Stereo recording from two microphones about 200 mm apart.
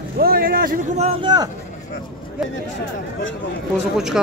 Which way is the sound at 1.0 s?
25° right (ahead or behind).